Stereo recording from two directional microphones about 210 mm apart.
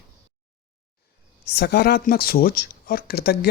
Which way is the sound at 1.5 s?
50° left (ahead or behind).